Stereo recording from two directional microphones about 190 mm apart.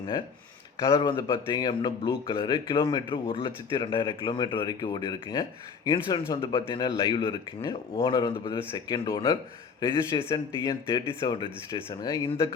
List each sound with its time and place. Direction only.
0.9 s speech: 25° left (ahead or behind)